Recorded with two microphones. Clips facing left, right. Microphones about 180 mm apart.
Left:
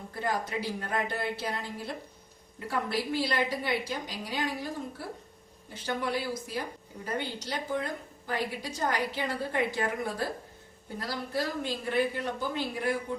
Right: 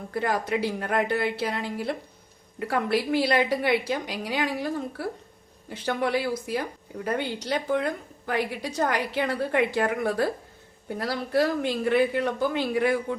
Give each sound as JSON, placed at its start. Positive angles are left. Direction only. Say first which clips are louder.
{"t": 0.1, "sound": "a woman's voice", "louder": "right 6 dB", "side_deg": -75}